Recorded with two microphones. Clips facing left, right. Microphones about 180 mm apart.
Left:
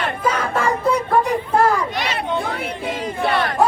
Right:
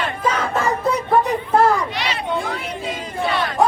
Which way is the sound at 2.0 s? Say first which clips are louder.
Left 1 dB; 55° left (ahead or behind).